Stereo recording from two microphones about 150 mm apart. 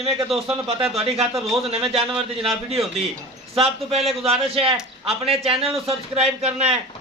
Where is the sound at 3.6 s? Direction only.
40° right (ahead or behind).